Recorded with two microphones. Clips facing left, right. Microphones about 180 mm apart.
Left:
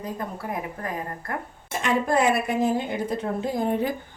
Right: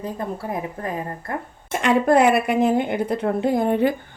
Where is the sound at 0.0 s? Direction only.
30° right (ahead or behind).